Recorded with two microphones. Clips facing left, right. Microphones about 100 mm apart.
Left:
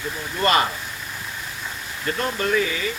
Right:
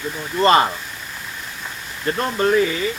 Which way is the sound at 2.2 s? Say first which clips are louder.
Right 5 dB; 30° right (ahead or behind).